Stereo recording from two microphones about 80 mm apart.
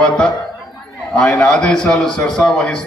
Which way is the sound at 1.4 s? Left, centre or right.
Centre.